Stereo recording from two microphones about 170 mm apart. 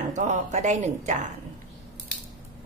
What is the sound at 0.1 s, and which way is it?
Speech, 45° right (ahead or behind).